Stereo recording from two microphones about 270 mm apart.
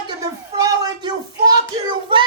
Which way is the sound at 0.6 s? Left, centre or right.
Centre.